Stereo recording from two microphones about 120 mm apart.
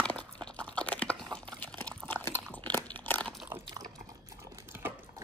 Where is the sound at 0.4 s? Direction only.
10° left (ahead or behind).